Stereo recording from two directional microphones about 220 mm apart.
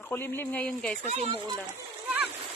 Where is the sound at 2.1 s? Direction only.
5° right (ahead or behind).